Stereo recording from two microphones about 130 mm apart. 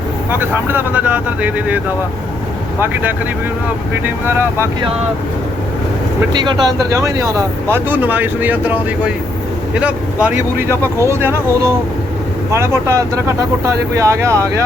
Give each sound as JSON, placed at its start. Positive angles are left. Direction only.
{"t": 0.3, "sound": "speech", "side_deg": -15}
{"t": 2.8, "sound": "speech", "side_deg": -15}
{"t": 6.3, "sound": "speech", "side_deg": -35}
{"t": 6.9, "sound": "speech", "side_deg": -25}